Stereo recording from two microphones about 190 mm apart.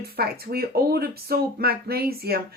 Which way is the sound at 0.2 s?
55° right (ahead or behind).